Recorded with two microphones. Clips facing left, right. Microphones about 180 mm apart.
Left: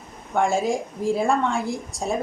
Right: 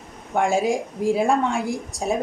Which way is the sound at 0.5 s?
15° right (ahead or behind).